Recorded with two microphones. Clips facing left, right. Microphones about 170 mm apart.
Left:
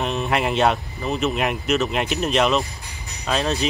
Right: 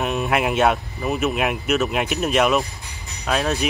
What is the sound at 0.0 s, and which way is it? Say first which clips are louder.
Speech: right 1 dB; 5° right (ahead or behind).